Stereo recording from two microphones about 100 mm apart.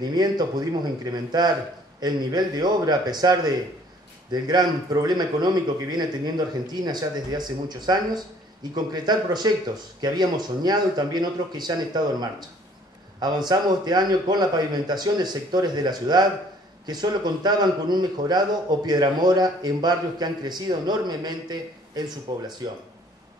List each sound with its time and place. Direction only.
0.0 s a man's voice: 45° right (ahead or behind)